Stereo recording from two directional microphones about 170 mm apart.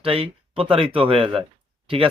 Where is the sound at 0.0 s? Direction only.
35° right (ahead or behind).